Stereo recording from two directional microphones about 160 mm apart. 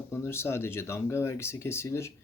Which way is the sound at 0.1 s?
15° left (ahead or behind).